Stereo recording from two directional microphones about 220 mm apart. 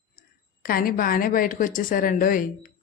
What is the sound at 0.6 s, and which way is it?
A woman's voice, 40° left (ahead or behind).